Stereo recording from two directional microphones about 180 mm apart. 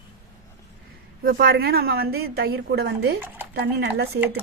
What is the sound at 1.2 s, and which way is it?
A woman's voice, 55° right (ahead or behind).